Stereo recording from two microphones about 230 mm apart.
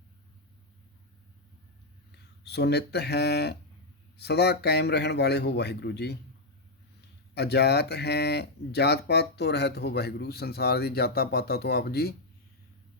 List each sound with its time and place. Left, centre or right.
2.4 s speech: left
7.3 s speech: left